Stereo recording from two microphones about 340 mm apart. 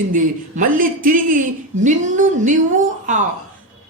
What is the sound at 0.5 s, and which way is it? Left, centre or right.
Music, right.